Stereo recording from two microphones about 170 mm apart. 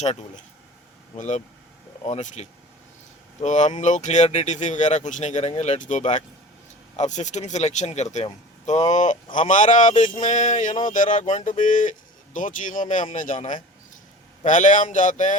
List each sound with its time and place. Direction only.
1.1 s speech: 45° left (ahead or behind)